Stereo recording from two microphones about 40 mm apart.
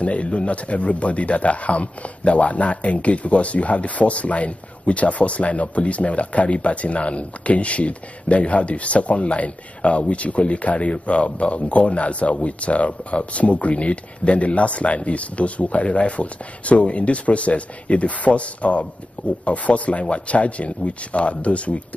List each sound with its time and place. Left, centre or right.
0.0 s speech: left